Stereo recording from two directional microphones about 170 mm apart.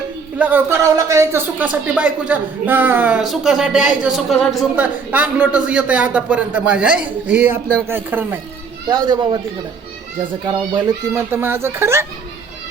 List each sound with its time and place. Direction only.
0.3 s speech: 10° right (ahead or behind)
8.9 s speech: 25° right (ahead or behind)
10.4 s speech: 20° right (ahead or behind)